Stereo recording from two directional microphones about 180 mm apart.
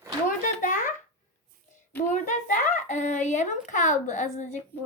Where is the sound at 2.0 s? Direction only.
45° left (ahead or behind).